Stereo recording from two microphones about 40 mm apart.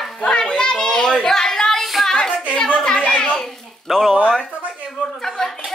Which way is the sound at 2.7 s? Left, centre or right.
Left.